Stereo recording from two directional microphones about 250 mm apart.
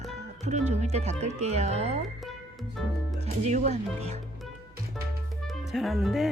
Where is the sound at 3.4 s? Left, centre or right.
Right.